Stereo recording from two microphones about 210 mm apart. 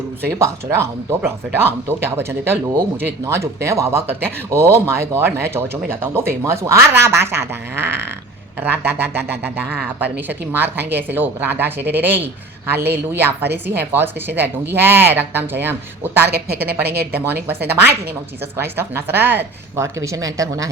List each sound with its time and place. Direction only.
0.3 s speech: 15° right (ahead or behind)
16.8 s speech: 50° right (ahead or behind)
17.1 s speech: 10° right (ahead or behind)